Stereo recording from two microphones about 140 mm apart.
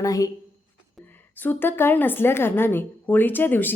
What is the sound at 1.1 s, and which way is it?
A woman's voice, 15° left (ahead or behind).